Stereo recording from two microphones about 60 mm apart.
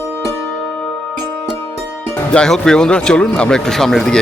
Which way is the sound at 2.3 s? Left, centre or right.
Centre.